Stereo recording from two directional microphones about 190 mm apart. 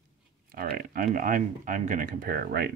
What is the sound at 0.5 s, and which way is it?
Speech, 50° right (ahead or behind).